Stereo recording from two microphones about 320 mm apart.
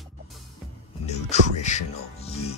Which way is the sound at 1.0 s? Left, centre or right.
Left.